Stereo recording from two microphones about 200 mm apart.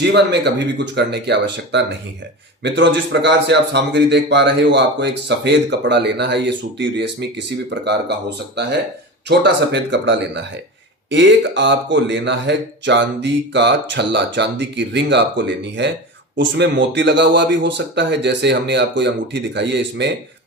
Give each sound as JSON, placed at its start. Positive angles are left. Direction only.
{"t": 0.0, "sound": "a man's voice", "side_deg": -60}
{"t": 9.4, "sound": "a man's voice", "side_deg": -60}